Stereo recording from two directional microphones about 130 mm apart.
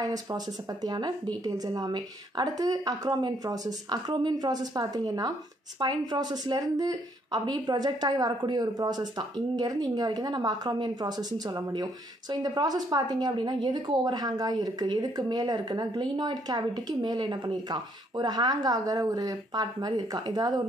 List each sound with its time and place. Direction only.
0.0 s a woman's voice: 30° right (ahead or behind)